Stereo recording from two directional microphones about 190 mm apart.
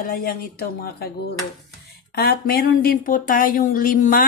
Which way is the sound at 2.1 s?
55° left (ahead or behind).